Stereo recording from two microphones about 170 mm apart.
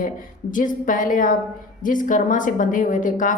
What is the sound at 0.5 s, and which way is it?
A woman's voice, 50° left (ahead or behind).